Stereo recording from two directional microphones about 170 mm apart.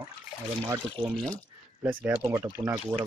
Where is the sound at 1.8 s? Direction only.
10° right (ahead or behind).